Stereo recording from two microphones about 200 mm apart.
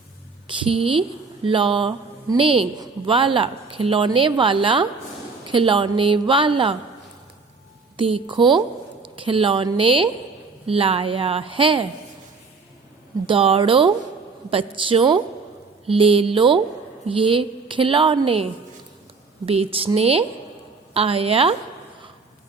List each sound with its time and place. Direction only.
0.4 s a woman's voice: 25° right (ahead or behind)
7.9 s a woman's voice: 25° right (ahead or behind)
13.2 s a woman's voice: 25° right (ahead or behind)
19.5 s a woman's voice: 30° right (ahead or behind)